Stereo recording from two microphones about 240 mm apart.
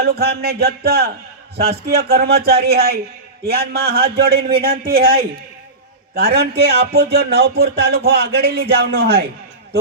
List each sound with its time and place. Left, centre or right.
0.0 s speech: right